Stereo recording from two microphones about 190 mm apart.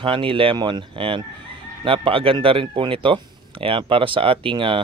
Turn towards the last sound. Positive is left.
turn(degrees=-25)  # may be behind; listen again after turning